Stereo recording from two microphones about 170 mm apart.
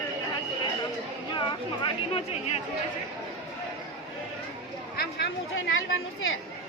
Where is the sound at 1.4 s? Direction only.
30° left (ahead or behind).